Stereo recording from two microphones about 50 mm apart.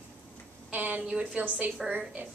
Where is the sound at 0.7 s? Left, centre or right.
Right.